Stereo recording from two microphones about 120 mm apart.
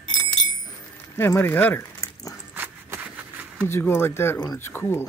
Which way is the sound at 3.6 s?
20° left (ahead or behind).